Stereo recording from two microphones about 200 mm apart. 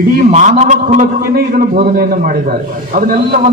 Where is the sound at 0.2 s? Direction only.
40° right (ahead or behind).